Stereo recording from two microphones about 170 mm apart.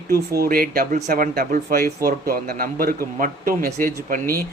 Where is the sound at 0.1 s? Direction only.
60° right (ahead or behind).